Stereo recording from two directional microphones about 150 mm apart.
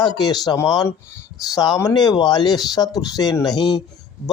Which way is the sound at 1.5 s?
25° left (ahead or behind).